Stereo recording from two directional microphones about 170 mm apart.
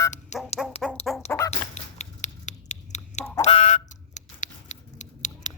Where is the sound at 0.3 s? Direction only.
45° left (ahead or behind).